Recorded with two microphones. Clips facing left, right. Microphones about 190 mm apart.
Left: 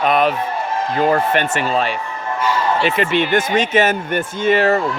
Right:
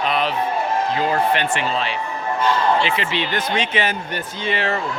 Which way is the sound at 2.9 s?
45° left (ahead or behind).